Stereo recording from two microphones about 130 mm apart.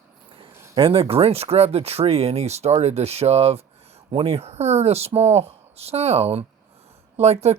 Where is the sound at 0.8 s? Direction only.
45° right (ahead or behind).